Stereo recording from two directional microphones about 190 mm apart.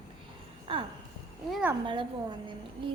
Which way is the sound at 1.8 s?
25° right (ahead or behind).